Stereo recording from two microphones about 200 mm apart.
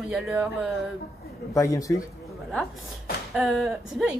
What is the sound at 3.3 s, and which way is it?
Speech, centre (ahead or behind).